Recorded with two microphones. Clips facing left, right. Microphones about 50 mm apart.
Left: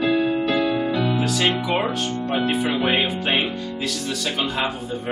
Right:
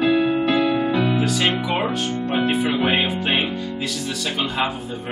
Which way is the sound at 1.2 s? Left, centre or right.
Centre.